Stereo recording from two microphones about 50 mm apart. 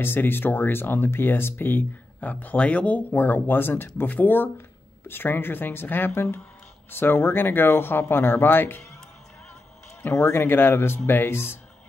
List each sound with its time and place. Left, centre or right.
0.0 s speech: left
2.1 s speech: left
10.0 s speech: left